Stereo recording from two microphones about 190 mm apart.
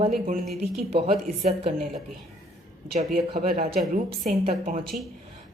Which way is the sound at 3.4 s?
50° right (ahead or behind).